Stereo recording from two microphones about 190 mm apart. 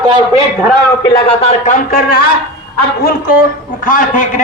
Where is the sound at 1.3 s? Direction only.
30° left (ahead or behind).